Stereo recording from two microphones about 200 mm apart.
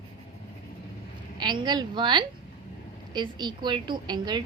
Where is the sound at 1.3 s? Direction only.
20° right (ahead or behind).